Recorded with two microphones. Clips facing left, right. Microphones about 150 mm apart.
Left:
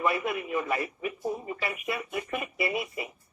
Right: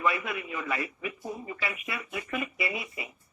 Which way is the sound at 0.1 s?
50° left (ahead or behind).